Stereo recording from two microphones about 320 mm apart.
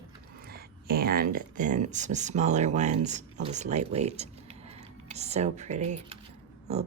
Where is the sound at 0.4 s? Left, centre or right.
Right.